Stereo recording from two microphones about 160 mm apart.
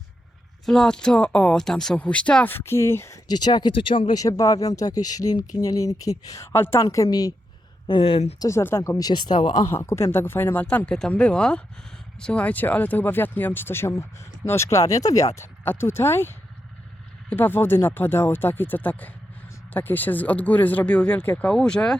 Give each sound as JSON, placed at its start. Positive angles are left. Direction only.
{"t": 0.6, "sound": "speech", "side_deg": 5}
{"t": 8.4, "sound": "speech", "side_deg": 15}